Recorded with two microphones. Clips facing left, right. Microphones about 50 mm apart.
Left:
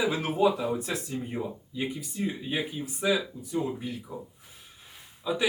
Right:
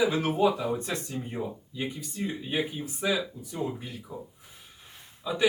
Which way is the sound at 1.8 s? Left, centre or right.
Centre.